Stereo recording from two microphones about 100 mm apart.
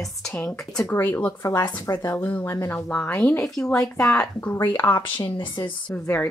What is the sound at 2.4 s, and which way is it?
Speech, 30° left (ahead or behind).